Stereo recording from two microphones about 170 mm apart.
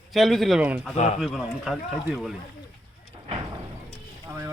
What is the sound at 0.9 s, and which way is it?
Speech, 40° left (ahead or behind).